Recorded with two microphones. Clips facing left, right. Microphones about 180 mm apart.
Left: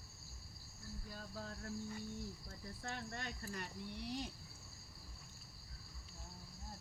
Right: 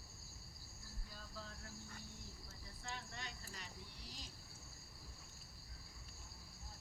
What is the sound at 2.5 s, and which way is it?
Speech, 55° left (ahead or behind).